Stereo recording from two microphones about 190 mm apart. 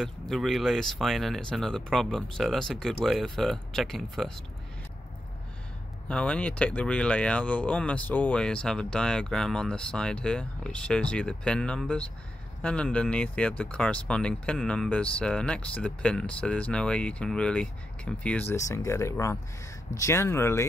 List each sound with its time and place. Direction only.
0.0 s speech: centre (ahead or behind)
6.0 s speech: 5° left (ahead or behind)